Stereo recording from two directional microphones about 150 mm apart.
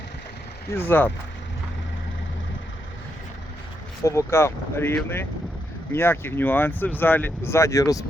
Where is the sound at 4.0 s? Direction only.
20° left (ahead or behind).